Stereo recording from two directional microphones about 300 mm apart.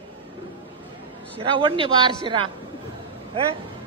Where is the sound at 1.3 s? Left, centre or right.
Centre.